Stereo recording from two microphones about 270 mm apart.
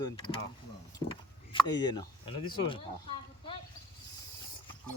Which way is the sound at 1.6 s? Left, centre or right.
Centre.